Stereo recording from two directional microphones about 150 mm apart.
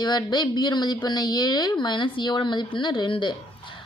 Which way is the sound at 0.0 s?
30° left (ahead or behind).